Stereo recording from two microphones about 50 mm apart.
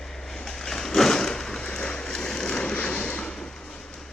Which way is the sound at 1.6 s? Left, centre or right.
Centre.